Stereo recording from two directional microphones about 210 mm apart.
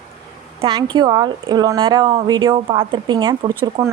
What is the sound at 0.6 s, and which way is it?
A woman's voice, 25° right (ahead or behind).